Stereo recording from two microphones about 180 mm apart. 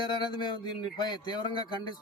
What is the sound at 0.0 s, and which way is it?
A man's voice, 25° left (ahead or behind).